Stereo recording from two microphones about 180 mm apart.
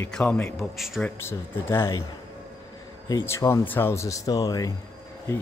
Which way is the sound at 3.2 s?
15° left (ahead or behind).